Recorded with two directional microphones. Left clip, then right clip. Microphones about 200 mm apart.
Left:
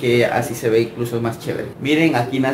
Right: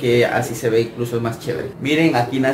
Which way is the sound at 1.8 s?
Centre (ahead or behind).